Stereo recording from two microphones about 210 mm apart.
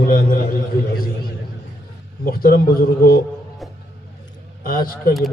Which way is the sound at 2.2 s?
45° left (ahead or behind).